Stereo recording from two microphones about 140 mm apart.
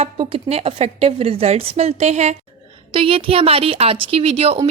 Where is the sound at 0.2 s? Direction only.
40° right (ahead or behind).